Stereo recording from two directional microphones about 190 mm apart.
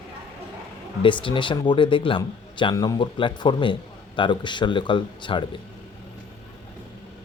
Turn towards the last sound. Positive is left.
turn(degrees=25)  # may be behind; listen again after turning